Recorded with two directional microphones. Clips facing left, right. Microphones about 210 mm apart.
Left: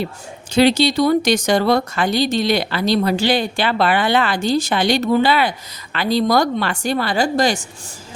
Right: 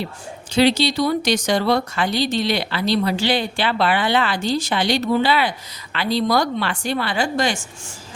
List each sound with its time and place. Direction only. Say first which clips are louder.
0.5 s speech: left 3 dB; 50° left (ahead or behind)